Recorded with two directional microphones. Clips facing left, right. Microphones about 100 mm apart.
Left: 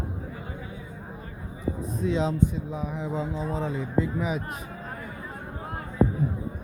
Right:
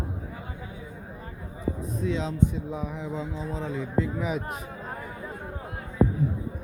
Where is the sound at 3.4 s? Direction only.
45° left (ahead or behind).